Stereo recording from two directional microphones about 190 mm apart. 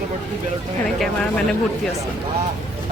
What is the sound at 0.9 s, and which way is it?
Speech, 5° left (ahead or behind).